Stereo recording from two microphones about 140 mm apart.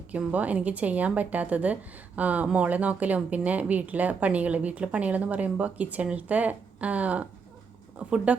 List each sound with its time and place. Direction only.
0.1 s a woman's voice: 10° right (ahead or behind)